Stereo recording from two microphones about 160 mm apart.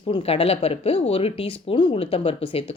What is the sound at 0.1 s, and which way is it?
Speech, 35° left (ahead or behind).